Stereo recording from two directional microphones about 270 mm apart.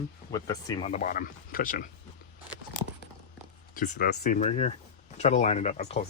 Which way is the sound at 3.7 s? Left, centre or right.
Left.